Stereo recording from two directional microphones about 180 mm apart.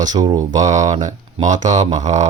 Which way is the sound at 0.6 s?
40° right (ahead or behind).